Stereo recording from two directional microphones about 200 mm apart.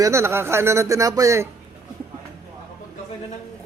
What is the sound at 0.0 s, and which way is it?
A man's voice, 15° right (ahead or behind).